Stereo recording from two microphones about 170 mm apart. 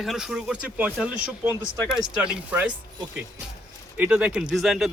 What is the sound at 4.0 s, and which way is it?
Speech, 5° right (ahead or behind).